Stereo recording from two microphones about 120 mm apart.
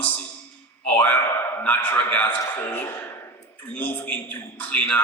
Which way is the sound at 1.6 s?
15° left (ahead or behind).